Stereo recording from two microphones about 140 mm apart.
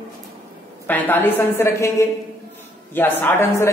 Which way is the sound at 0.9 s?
15° left (ahead or behind).